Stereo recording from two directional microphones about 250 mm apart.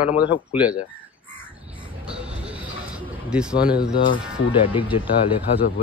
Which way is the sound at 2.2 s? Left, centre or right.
Centre.